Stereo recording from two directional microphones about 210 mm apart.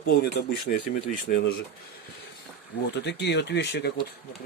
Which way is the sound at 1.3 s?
40° left (ahead or behind).